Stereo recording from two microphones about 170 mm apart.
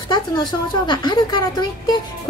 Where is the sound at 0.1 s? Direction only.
25° left (ahead or behind).